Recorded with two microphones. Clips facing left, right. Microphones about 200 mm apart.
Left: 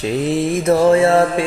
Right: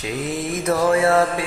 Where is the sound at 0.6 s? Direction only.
25° left (ahead or behind).